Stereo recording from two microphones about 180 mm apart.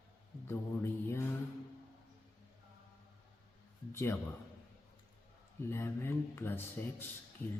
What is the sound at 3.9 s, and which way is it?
Speech, 15° left (ahead or behind).